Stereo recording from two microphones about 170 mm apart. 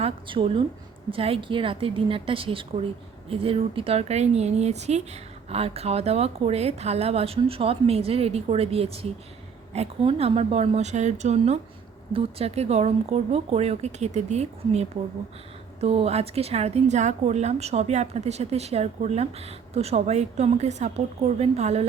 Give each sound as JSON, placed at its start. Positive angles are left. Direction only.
{"t": 0.0, "sound": "a woman's voice", "side_deg": -35}